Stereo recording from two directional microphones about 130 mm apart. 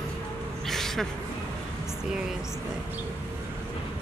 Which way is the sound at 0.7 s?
Centre (ahead or behind).